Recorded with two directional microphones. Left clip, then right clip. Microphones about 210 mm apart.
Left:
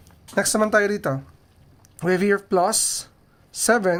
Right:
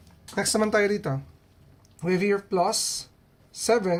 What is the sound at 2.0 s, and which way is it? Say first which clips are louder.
Speech: left 4 dB; 50° left (ahead or behind).